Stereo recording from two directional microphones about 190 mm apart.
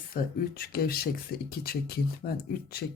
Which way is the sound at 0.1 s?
50° left (ahead or behind).